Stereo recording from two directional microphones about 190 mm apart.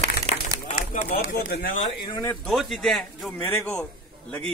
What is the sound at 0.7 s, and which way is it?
Speech, 35° left (ahead or behind).